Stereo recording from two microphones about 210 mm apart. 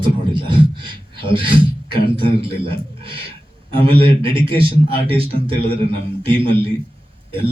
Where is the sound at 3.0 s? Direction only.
25° right (ahead or behind).